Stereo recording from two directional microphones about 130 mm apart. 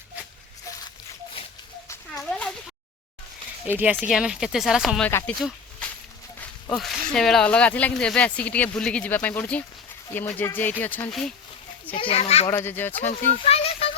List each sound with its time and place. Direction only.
3.7 s speech: 15° right (ahead or behind)
5.0 s speech: 10° left (ahead or behind)
6.7 s speech: centre (ahead or behind)
11.9 s a child's voice: 50° left (ahead or behind)
12.5 s speech: 20° left (ahead or behind)
13.4 s a sound: 50° left (ahead or behind)